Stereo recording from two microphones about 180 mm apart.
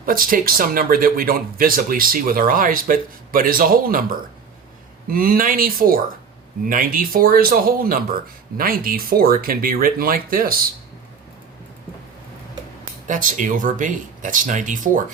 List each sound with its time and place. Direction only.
0.0 s speech: 50° right (ahead or behind)
5.1 s speech: 55° right (ahead or behind)
13.1 s speech: 45° right (ahead or behind)